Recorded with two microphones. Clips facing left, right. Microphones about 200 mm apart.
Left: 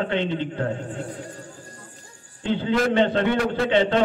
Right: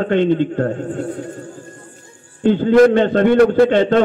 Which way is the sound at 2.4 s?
45° right (ahead or behind).